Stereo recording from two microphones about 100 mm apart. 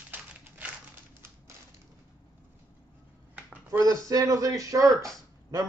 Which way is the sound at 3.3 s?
20° right (ahead or behind).